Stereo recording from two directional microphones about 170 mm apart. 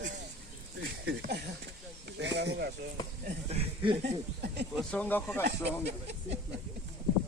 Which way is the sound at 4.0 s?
75° right (ahead or behind).